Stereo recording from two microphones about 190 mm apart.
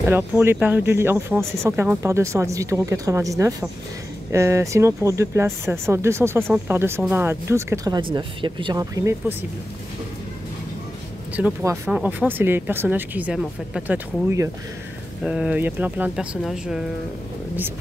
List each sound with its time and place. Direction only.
0.0 s speech: 10° right (ahead or behind)
11.3 s speech: 10° right (ahead or behind)